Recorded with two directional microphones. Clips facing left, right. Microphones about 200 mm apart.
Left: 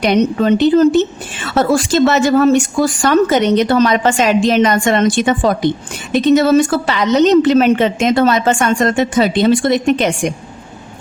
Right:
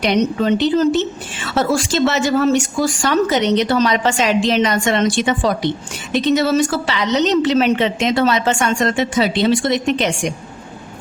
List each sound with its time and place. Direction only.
0.0 s speech: 50° left (ahead or behind)